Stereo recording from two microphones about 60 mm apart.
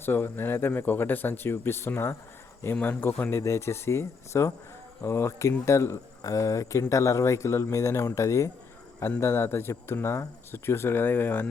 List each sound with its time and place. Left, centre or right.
0.0 s speech: left
3.1 s speech: left
3.4 s speech: left
6.2 s speech: left
9.2 s speech: left